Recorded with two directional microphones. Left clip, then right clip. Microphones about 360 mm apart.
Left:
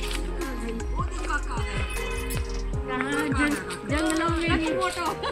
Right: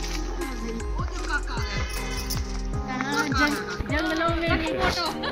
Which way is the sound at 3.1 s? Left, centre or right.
Centre.